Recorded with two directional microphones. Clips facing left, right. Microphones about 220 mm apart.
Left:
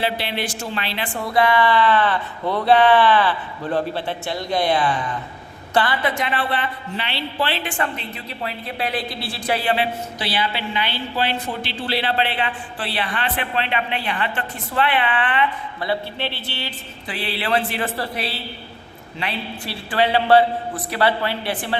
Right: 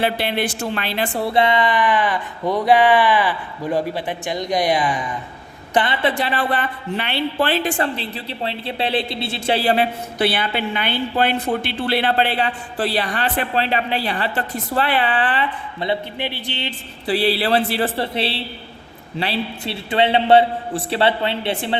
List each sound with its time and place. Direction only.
0.0 s a woman's voice: 50° right (ahead or behind); by 9.7 s 30° right (ahead or behind)
9.7 s a woman's voice: 55° right (ahead or behind); by 15.4 s 35° right (ahead or behind)
15.8 s a man's voice: 20° right (ahead or behind)
17.1 s a woman's voice: 35° right (ahead or behind)